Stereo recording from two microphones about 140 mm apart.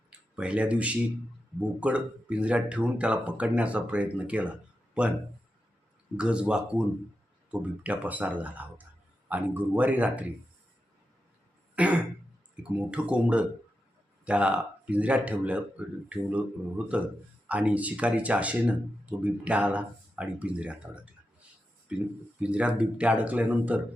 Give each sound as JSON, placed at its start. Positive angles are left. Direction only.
{"t": 0.1, "sound": "speech", "side_deg": -5}
{"t": 6.1, "sound": "speech", "side_deg": -5}
{"t": 11.8, "sound": "speech", "side_deg": -10}